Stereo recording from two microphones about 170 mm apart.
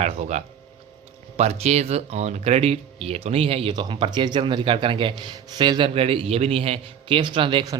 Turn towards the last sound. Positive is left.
turn(degrees=-25)  # may be behind; listen again after turning